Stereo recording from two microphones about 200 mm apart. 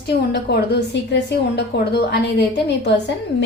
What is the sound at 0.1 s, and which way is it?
A woman's voice, 55° left (ahead or behind).